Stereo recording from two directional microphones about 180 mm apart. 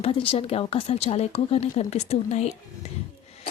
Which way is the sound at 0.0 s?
30° left (ahead or behind).